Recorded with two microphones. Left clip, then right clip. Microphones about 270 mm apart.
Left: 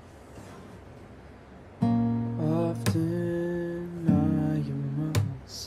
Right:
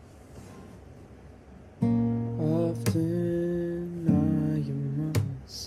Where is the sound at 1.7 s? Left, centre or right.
Centre.